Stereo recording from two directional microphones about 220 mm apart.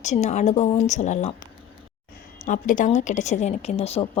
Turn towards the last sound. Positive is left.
turn(degrees=25)  # may be behind; listen again after turning